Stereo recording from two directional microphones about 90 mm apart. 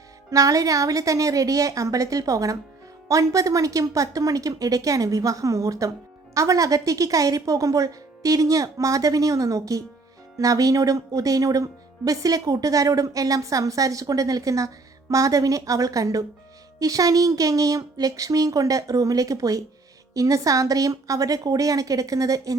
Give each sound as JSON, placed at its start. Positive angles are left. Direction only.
{"t": 0.3, "sound": "speech", "side_deg": -40}